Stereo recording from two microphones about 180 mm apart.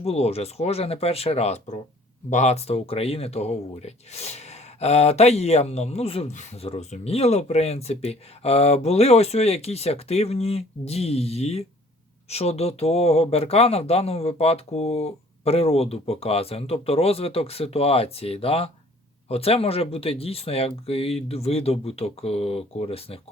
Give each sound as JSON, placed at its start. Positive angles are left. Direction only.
{"t": 0.0, "sound": "speech", "side_deg": 35}